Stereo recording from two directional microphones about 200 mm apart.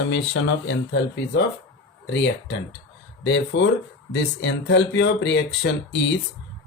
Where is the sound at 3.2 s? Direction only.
65° left (ahead or behind).